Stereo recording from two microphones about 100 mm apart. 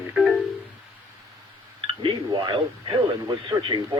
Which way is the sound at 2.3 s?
50° right (ahead or behind).